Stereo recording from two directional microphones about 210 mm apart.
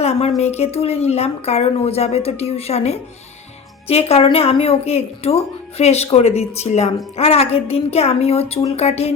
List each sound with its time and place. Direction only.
0.0 s a woman's voice: 30° left (ahead or behind)